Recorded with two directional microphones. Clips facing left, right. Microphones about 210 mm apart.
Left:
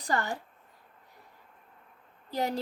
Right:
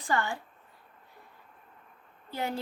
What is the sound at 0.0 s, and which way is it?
Speech, 40° left (ahead or behind).